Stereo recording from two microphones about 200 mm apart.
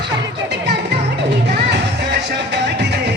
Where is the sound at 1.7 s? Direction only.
60° right (ahead or behind).